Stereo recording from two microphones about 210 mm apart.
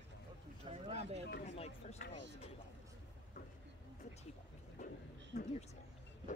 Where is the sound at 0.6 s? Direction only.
30° right (ahead or behind).